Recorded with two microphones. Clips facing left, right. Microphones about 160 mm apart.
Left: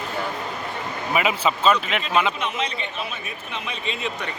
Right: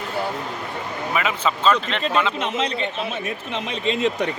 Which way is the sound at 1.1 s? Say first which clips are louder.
Left 2 dB; 10° left (ahead or behind).